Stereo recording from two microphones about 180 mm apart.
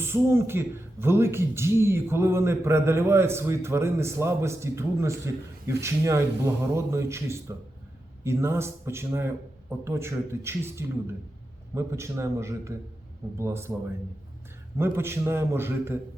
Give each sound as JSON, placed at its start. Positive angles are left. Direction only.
{"t": 0.0, "sound": "speech", "side_deg": -15}
{"t": 14.8, "sound": "speech", "side_deg": -15}